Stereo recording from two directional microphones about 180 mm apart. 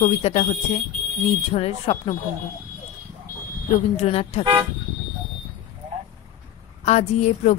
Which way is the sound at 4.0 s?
35° left (ahead or behind).